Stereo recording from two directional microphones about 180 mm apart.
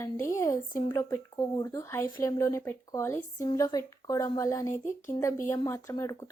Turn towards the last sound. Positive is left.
turn(degrees=15)  # may be behind; listen again after turning